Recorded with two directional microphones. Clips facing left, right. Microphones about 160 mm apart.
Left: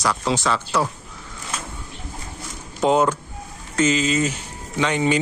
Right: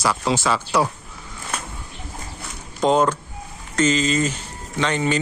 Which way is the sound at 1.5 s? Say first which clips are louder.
Right 1 dB; 60° right (ahead or behind).